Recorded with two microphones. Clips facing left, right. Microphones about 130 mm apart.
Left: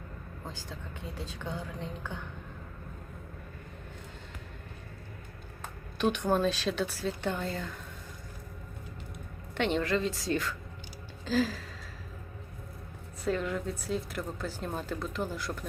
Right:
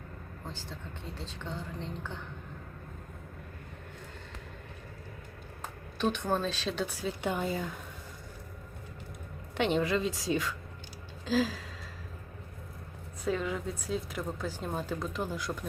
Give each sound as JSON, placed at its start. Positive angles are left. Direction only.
{"t": 1.2, "sound": "a woman's voice", "side_deg": 10}
{"t": 6.1, "sound": "speech", "side_deg": 10}
{"t": 7.2, "sound": "speech", "side_deg": -10}
{"t": 9.6, "sound": "speech", "side_deg": -5}
{"t": 13.2, "sound": "speech", "side_deg": 0}